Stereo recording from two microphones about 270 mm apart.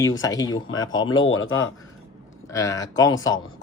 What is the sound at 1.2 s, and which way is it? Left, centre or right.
Speech, left.